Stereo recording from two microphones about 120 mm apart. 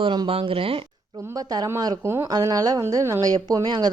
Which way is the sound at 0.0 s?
45° right (ahead or behind).